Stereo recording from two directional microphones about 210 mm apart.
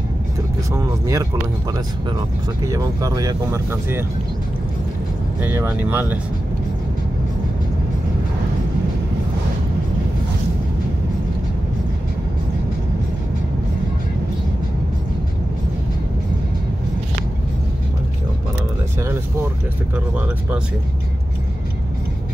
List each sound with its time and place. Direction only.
0.7 s speech: 15° right (ahead or behind)
2.7 s speech: 15° right (ahead or behind)
5.4 s speech: 10° right (ahead or behind)